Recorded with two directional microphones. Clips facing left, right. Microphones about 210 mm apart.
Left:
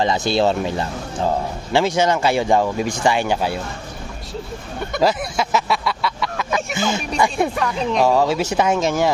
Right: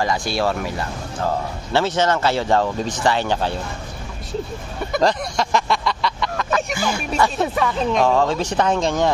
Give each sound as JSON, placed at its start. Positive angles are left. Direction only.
{"t": 0.0, "sound": "speech", "side_deg": 25}
{"t": 1.7, "sound": "speech", "side_deg": 15}
{"t": 4.9, "sound": "a sound", "side_deg": 5}
{"t": 6.5, "sound": "a sound", "side_deg": 25}
{"t": 7.2, "sound": "speech", "side_deg": 15}
{"t": 7.5, "sound": "speech", "side_deg": 0}